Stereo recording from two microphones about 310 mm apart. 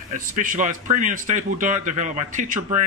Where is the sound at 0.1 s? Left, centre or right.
Right.